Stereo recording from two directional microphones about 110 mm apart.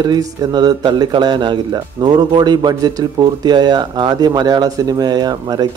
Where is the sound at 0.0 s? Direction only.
35° right (ahead or behind).